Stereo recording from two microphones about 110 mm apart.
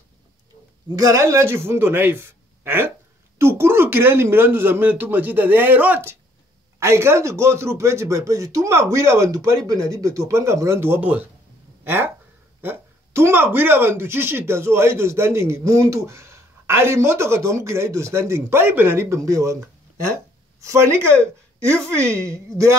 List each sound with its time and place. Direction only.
0.8 s speech: 35° right (ahead or behind)